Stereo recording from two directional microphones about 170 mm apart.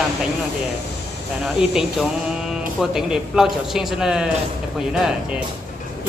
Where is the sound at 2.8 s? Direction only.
5° right (ahead or behind).